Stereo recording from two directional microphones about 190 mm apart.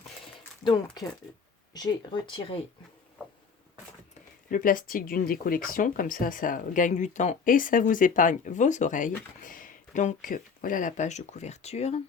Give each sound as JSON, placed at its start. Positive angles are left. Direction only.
{"t": 0.6, "sound": "speech", "side_deg": 20}
{"t": 4.5, "sound": "speech", "side_deg": 45}